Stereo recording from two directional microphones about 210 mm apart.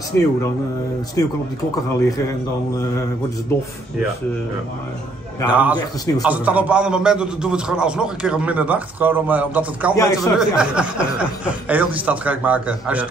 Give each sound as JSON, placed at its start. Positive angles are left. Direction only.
{"t": 0.1, "sound": "a man's voice", "side_deg": 10}
{"t": 5.5, "sound": "a man's voice", "side_deg": -5}
{"t": 9.9, "sound": "a man's voice", "side_deg": 15}
{"t": 10.6, "sound": "a man's voice", "side_deg": -5}